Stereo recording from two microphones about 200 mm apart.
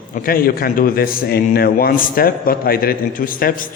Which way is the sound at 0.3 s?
45° left (ahead or behind).